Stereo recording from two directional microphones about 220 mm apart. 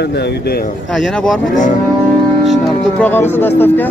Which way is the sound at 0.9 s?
Centre (ahead or behind).